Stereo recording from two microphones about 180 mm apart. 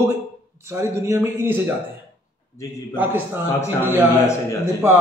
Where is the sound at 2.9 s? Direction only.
10° right (ahead or behind).